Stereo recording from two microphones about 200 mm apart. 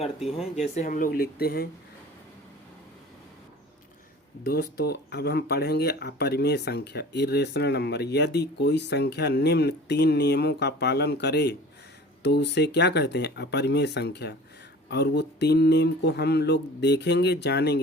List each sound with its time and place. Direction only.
0.3 s speech: centre (ahead or behind)
0.8 s speech: 40° left (ahead or behind)
4.4 s speech: 50° left (ahead or behind)